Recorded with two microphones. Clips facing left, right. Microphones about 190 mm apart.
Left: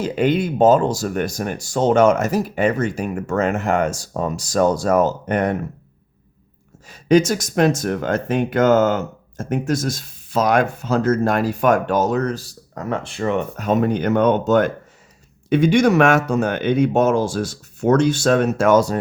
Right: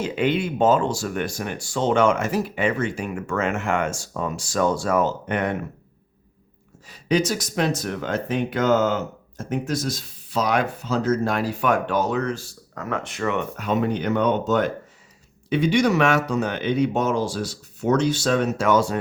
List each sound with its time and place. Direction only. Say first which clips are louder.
0.0 s speech: left 4 dB; 40° left (ahead or behind)
6.8 s speech: left 7 dB; 45° left (ahead or behind)